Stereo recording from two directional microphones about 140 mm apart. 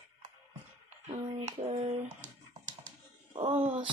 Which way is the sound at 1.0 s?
50° right (ahead or behind).